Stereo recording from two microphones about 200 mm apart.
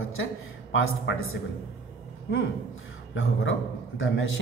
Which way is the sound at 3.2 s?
65° left (ahead or behind).